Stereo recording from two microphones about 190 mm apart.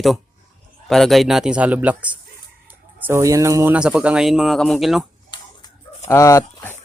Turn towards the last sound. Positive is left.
turn(degrees=10)  # may be behind; listen again after turning